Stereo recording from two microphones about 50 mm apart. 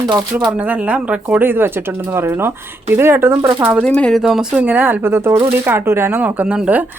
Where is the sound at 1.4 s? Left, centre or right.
Right.